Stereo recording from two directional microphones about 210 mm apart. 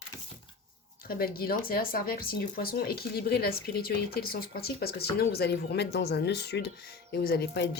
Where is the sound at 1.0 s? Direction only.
45° left (ahead or behind).